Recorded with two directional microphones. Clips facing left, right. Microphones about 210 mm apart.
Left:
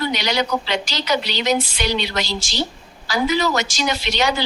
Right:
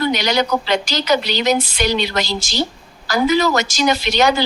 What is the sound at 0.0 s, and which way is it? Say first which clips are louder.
Speech: right 4 dB; 45° right (ahead or behind).